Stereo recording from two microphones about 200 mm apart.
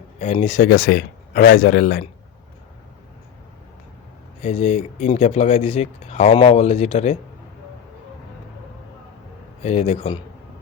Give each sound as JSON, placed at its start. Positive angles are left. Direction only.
{"t": 0.2, "sound": "speech", "side_deg": 35}
{"t": 4.4, "sound": "speech", "side_deg": 35}
{"t": 9.6, "sound": "speech", "side_deg": 30}